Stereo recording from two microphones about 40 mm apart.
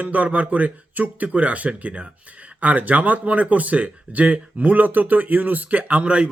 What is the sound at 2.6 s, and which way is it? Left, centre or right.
Speech, right.